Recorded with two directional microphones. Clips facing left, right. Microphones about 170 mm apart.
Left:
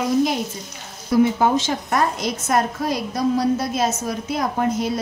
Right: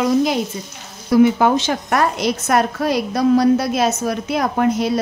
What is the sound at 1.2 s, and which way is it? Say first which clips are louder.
A woman's voice: right 4 dB; 75° right (ahead or behind).